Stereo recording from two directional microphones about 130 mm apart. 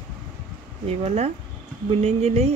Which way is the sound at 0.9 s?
60° right (ahead or behind).